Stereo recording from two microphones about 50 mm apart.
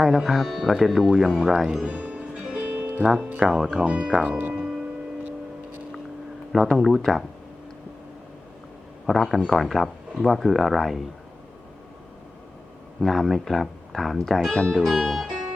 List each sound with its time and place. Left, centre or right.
0.0 s speech: centre
1.9 s music: right
2.6 s music: right
3.2 s speech: right
3.4 s speech: centre
4.3 s speech: right
6.5 s speech: centre
9.0 s speech: centre
13.0 s speech: centre